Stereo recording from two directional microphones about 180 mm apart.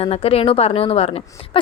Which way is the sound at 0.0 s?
35° left (ahead or behind).